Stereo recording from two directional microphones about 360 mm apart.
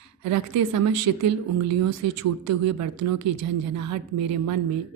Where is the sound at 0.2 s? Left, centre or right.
Right.